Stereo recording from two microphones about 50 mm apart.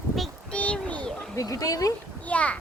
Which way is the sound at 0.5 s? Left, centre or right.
Left.